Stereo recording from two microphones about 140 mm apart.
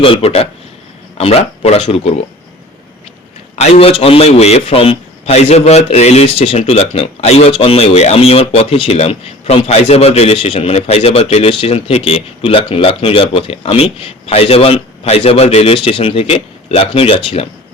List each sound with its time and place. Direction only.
0.0 s a man's voice: 45° left (ahead or behind)
3.5 s a man's voice: 50° left (ahead or behind)